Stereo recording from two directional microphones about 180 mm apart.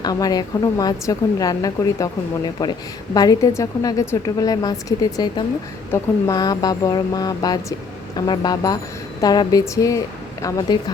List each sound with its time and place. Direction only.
0.0 s speech: 20° left (ahead or behind)